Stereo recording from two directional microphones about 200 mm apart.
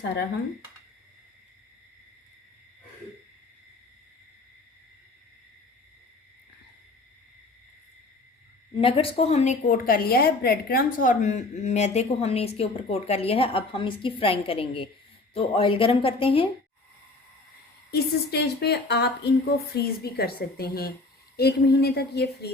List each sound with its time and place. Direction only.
8.7 s a woman's voice: 25° left (ahead or behind)
17.9 s a woman's voice: 55° left (ahead or behind)